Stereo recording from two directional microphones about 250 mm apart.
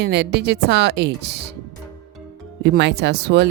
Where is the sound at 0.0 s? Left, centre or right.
Right.